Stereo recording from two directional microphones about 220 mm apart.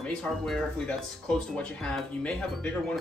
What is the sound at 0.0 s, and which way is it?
Speech, 5° left (ahead or behind).